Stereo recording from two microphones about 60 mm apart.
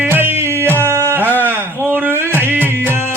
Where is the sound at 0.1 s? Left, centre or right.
Right.